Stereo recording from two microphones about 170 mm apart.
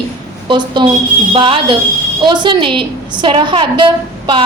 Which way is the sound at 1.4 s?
30° right (ahead or behind).